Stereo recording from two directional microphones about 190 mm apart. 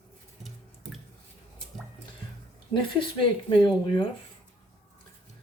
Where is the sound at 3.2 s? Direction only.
25° left (ahead or behind).